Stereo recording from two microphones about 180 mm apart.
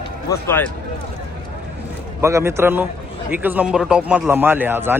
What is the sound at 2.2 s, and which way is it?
A man's voice, 15° right (ahead or behind).